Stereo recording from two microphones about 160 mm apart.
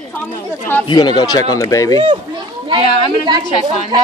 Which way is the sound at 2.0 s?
30° right (ahead or behind).